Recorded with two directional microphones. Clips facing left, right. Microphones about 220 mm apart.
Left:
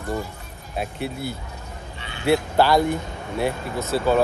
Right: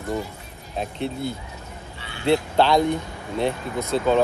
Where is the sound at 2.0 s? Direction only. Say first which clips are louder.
Left 1 dB; 20° left (ahead or behind).